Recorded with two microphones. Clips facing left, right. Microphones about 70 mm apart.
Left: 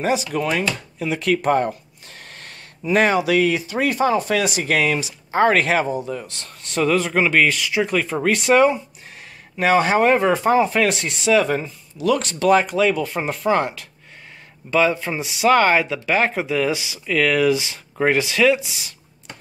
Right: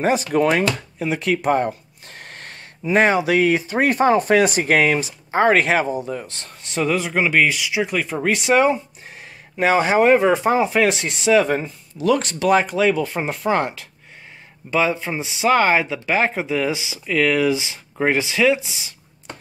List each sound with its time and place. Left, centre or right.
0.0 s speech: right
2.0 s snort: right
2.9 s speech: right